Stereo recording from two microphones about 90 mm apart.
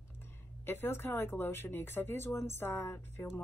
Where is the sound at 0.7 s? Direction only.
25° left (ahead or behind).